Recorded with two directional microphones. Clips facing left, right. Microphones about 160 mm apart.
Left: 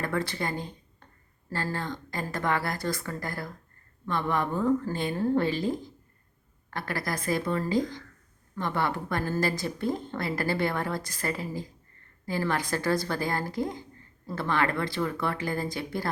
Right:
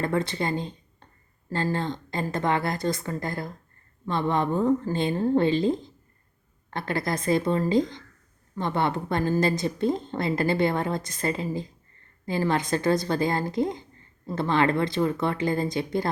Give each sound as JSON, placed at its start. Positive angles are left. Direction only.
{"t": 0.0, "sound": "a woman's voice", "side_deg": -20}